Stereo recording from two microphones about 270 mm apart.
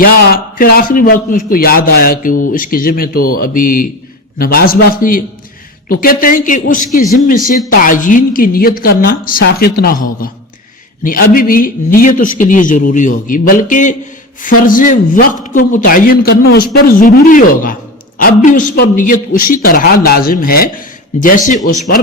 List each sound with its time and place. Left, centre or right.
0.0 s a man's voice: left